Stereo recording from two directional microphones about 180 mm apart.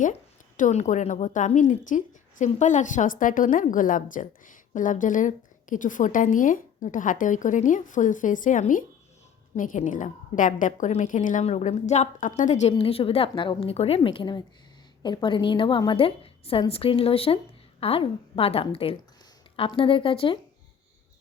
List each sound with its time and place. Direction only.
0.0 s a woman's voice: 45° left (ahead or behind); by 20.4 s 30° left (ahead or behind)